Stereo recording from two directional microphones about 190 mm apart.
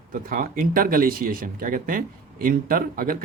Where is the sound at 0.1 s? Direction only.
50° right (ahead or behind).